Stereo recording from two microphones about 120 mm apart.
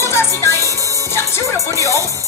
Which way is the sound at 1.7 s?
25° right (ahead or behind).